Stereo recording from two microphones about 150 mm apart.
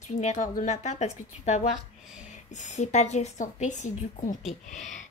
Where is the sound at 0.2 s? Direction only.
50° left (ahead or behind).